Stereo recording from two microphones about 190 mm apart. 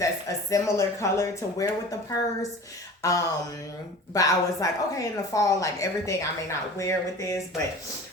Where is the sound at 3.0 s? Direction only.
15° left (ahead or behind).